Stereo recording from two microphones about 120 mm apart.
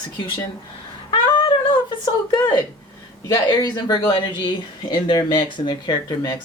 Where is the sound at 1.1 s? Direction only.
40° left (ahead or behind).